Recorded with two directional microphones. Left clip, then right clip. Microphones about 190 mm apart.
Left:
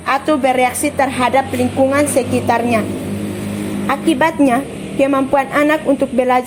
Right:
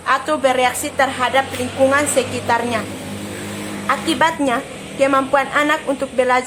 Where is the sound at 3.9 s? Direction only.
15° left (ahead or behind).